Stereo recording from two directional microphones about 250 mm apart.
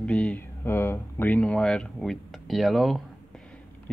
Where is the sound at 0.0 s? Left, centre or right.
Centre.